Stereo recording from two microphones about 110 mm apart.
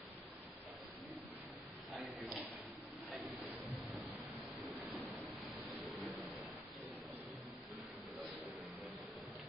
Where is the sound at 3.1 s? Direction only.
15° right (ahead or behind).